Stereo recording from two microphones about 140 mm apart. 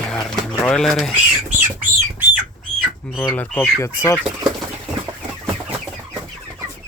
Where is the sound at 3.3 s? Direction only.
10° left (ahead or behind).